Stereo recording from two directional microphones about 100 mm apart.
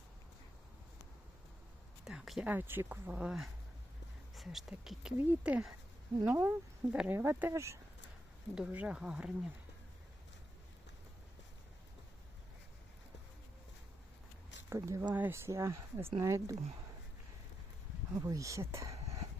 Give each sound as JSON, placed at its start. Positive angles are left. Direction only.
{"t": 2.0, "sound": "speech", "side_deg": -5}
{"t": 2.5, "sound": "speech", "side_deg": -20}
{"t": 8.5, "sound": "speech", "side_deg": -10}
{"t": 14.7, "sound": "speech", "side_deg": -35}
{"t": 15.0, "sound": "speech", "side_deg": -20}
{"t": 18.1, "sound": "speech", "side_deg": -30}